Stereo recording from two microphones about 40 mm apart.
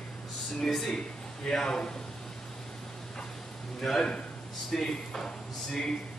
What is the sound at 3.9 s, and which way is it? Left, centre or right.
Speech, left.